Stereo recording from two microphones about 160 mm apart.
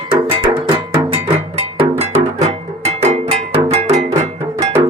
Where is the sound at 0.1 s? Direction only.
30° right (ahead or behind).